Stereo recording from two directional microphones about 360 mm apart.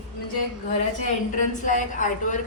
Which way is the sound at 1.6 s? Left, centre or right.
Left.